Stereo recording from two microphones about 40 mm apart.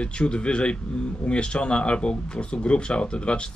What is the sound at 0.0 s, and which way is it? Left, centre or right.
Speech, left.